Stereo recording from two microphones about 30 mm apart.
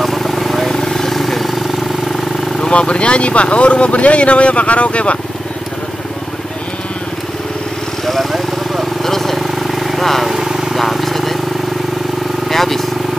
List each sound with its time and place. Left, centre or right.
0.0 s vehicle: centre
0.7 s vehicle: centre
2.7 s speech: left
8.0 s vehicle: centre
10.2 s vehicle: centre
10.8 s vehicle: centre
12.4 s vehicle: centre